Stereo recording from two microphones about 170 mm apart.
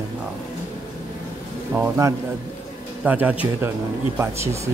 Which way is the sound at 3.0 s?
10° right (ahead or behind).